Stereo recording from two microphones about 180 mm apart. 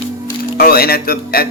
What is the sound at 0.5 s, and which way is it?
Speech, 55° left (ahead or behind).